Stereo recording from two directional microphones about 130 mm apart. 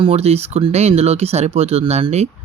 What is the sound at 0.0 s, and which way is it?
Speech, 50° right (ahead or behind).